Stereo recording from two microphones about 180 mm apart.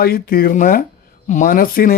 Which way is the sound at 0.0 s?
55° left (ahead or behind).